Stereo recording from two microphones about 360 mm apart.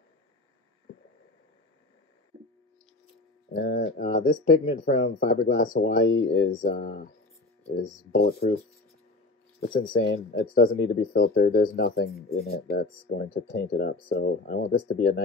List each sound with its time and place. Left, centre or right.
3.5 s speech: left
8.1 s speech: left
9.6 s speech: left